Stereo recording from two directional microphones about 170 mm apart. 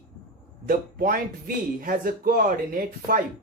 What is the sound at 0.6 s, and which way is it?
Speech, 60° right (ahead or behind).